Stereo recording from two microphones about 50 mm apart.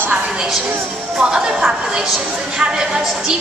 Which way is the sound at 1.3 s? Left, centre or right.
Centre.